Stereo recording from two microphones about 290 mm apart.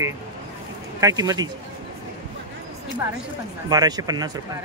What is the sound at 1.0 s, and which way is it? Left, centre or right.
Speech, centre.